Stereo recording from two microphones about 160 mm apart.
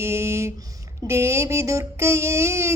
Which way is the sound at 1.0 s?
15° right (ahead or behind).